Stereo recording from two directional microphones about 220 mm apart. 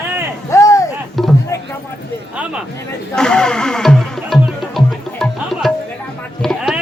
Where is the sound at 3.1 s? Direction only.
5° left (ahead or behind).